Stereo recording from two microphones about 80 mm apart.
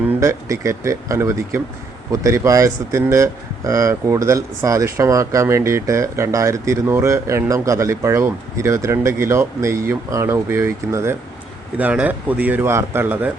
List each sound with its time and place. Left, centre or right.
0.2 s speech: right
11.8 s a man's voice: centre